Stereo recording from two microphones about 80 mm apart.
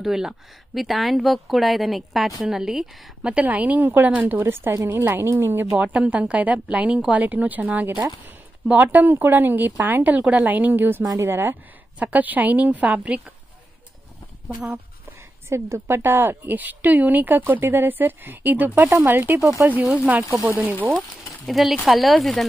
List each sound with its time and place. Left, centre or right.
0.0 s speech: centre
3.2 s a woman's voice: centre; by 5.7 s right
5.8 s a woman's voice: centre
15.4 s a woman's voice: right
21.5 s speech: centre